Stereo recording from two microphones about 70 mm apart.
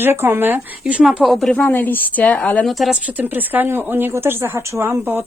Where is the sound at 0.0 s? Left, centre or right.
Right.